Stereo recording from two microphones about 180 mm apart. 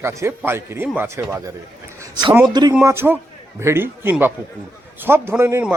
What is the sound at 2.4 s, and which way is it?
Speech, 25° right (ahead or behind).